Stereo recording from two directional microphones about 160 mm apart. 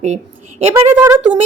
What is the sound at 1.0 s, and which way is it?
Speech, 15° right (ahead or behind).